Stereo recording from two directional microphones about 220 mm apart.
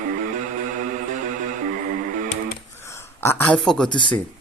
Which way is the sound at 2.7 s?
10° left (ahead or behind).